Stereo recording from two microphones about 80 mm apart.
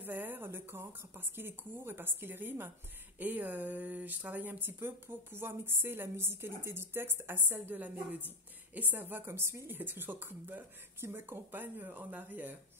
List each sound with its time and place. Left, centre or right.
0.0 s speech: right